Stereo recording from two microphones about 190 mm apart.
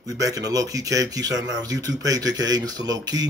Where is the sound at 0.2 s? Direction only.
20° right (ahead or behind).